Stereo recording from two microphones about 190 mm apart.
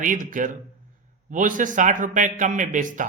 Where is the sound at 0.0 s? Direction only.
45° right (ahead or behind).